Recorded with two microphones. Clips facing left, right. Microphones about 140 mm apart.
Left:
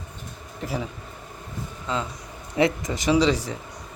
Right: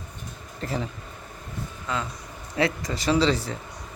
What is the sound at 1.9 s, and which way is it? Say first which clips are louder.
A man's voice: left 2 dB; 25° left (ahead or behind).